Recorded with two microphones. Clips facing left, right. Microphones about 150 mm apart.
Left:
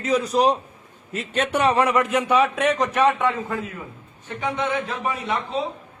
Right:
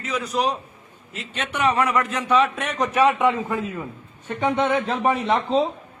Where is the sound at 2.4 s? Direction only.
Centre (ahead or behind).